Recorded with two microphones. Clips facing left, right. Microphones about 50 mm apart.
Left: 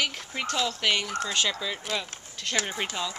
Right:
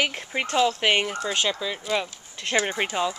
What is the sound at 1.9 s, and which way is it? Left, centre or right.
Speech, right.